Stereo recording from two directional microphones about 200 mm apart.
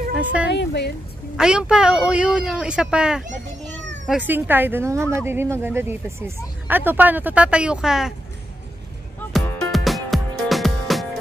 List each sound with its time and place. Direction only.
0.2 s a woman's voice: 5° right (ahead or behind)
0.5 s speech: 60° left (ahead or behind)
1.3 s speech: 5° right (ahead or behind)
9.3 s music: centre (ahead or behind)